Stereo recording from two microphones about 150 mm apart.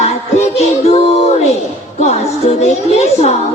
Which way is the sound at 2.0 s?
45° left (ahead or behind).